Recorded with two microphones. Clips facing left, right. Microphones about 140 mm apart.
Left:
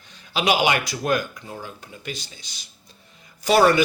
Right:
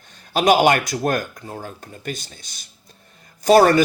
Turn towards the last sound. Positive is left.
turn(degrees=-45)  # may be behind; listen again after turning